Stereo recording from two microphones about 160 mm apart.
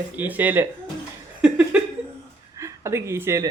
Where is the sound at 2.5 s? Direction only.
20° right (ahead or behind).